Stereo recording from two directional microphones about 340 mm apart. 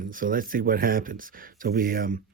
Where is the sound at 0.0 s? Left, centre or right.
Right.